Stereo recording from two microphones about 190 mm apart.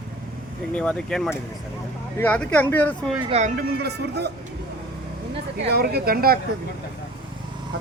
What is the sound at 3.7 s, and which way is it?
Speech, 60° right (ahead or behind).